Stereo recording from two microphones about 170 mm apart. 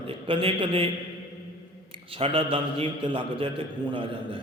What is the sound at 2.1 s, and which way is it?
Mantra, 35° right (ahead or behind).